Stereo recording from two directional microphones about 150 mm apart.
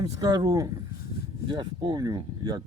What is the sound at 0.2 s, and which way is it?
Speech, 25° right (ahead or behind).